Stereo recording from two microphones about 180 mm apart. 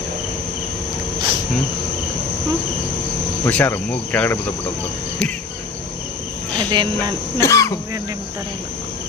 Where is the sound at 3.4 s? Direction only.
10° left (ahead or behind).